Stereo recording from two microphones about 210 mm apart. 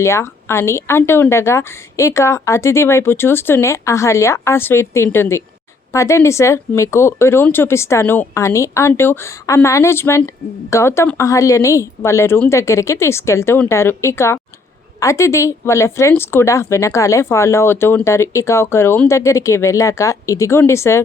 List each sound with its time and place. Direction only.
0.0 s speech: 10° left (ahead or behind)